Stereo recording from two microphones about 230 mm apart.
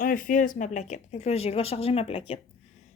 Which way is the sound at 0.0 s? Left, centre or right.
Left.